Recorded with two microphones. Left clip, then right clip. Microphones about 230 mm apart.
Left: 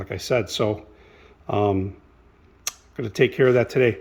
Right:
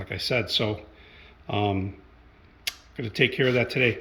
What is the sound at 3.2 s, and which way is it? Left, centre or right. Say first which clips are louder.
Speech: left 5 dB; centre.